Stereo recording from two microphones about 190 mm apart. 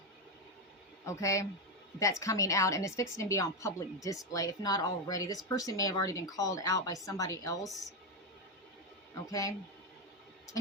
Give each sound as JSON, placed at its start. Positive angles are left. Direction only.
{"t": 1.0, "sound": "a woman's voice", "side_deg": 15}
{"t": 9.3, "sound": "a woman's voice", "side_deg": 15}